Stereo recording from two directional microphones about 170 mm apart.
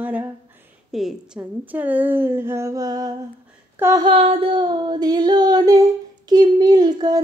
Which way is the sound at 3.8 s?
15° right (ahead or behind).